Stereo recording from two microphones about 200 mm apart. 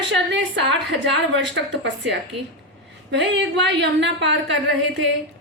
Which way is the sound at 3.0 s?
60° right (ahead or behind).